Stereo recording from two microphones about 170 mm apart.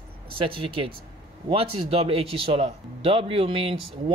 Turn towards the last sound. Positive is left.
turn(degrees=-30)  # may be behind; listen again after turning